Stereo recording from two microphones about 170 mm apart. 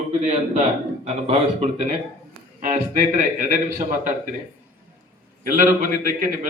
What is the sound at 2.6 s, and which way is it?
Speech, 50° right (ahead or behind).